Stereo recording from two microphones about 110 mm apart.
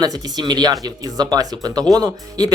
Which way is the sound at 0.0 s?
40° right (ahead or behind).